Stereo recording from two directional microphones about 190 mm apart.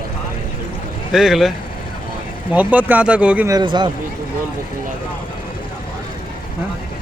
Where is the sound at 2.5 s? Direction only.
10° right (ahead or behind).